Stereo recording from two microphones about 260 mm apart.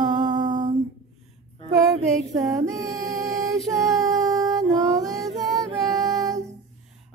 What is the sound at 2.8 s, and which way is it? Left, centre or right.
Music, centre.